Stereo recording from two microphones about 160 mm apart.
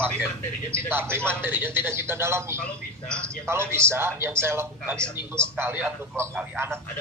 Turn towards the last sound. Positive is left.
turn(degrees=-10)  # may be behind; listen again after turning